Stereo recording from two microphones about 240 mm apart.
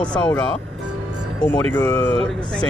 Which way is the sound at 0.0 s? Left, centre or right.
Centre.